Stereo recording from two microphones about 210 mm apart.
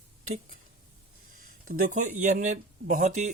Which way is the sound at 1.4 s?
40° right (ahead or behind).